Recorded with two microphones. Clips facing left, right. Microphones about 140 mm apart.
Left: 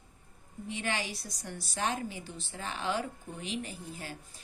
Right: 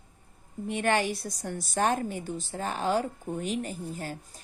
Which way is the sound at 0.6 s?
55° right (ahead or behind).